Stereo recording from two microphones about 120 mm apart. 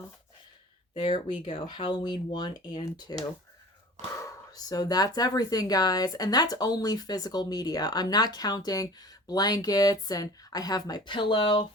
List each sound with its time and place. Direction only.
0.9 s speech: 40° left (ahead or behind)